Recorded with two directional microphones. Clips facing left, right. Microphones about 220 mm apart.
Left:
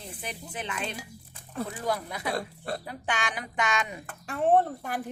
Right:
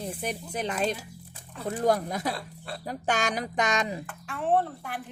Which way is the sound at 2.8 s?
40° right (ahead or behind).